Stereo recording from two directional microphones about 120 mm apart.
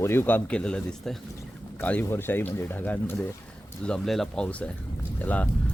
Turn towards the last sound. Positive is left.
turn(degrees=10)  # may be behind; listen again after turning